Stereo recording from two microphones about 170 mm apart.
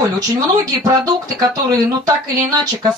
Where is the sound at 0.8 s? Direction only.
20° right (ahead or behind).